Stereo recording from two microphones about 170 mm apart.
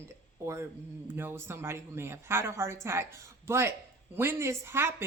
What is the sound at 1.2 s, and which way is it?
Speech, 15° right (ahead or behind).